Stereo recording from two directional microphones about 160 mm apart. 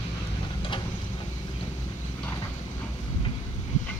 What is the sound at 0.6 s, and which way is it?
Vehicle, 30° left (ahead or behind).